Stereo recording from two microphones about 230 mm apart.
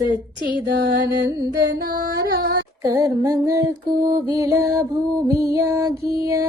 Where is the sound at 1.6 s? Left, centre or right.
Right.